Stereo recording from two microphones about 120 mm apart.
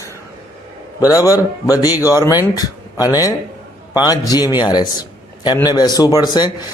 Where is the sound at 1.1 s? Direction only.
30° left (ahead or behind).